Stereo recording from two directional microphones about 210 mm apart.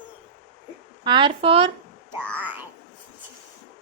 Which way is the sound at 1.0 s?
20° right (ahead or behind).